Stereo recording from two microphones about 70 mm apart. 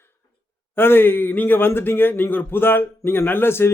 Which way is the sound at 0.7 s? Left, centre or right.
Left.